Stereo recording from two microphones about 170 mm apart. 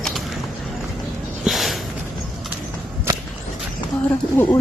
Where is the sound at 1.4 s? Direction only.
Centre (ahead or behind).